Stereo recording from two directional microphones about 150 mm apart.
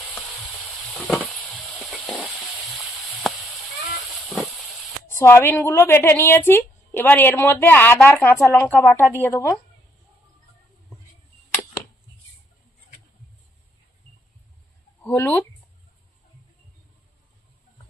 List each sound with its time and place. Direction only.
0.0 s sizzle: centre (ahead or behind)
2.0 s frying: 10° left (ahead or behind)
4.3 s vehicle: centre (ahead or behind)
5.1 s a woman's voice: 15° left (ahead or behind)
15.0 s a woman's voice: 10° left (ahead or behind)